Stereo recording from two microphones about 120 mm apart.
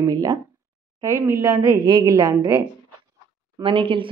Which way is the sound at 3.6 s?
45° right (ahead or behind).